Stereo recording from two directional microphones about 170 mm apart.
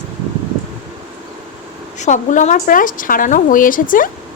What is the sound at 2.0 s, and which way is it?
Speech, 45° left (ahead or behind).